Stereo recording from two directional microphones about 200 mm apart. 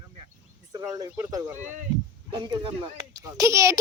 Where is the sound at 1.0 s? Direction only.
15° right (ahead or behind).